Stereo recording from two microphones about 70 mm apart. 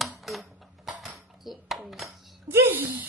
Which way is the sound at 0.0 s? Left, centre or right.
Centre.